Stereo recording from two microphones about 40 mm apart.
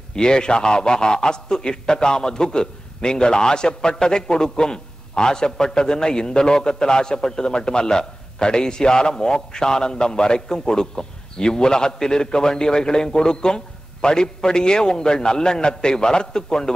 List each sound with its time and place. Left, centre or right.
0.1 s a man's voice: centre